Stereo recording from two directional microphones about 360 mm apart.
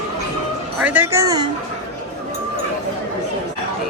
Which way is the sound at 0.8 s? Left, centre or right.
Centre.